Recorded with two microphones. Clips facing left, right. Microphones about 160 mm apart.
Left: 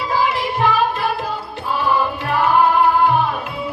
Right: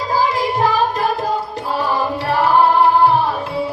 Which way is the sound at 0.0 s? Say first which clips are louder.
Right 2 dB; 35° right (ahead or behind).